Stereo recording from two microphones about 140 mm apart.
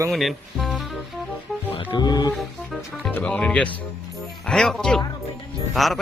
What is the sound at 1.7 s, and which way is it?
Music, 30° left (ahead or behind).